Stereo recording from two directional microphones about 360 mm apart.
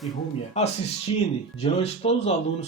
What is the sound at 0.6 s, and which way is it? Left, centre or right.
Speech, centre.